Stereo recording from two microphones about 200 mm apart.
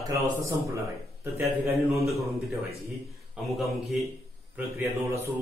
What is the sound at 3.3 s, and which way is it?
Speech, centre (ahead or behind).